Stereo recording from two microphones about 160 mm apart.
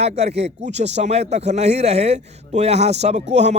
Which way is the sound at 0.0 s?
40° right (ahead or behind).